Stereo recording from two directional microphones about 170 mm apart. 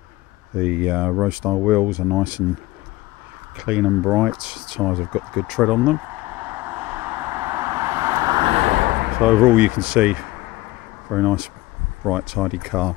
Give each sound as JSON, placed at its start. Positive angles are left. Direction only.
{"t": 0.6, "sound": "speech", "side_deg": -5}
{"t": 3.5, "sound": "speech", "side_deg": -5}
{"t": 6.4, "sound": "vehicle", "side_deg": -10}
{"t": 8.5, "sound": "vehicle", "side_deg": -40}
{"t": 9.2, "sound": "speech", "side_deg": -10}